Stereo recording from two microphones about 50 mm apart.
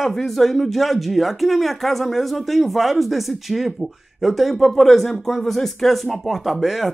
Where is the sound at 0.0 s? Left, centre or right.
Centre.